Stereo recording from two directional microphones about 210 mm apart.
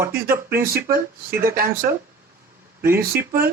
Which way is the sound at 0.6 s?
45° right (ahead or behind).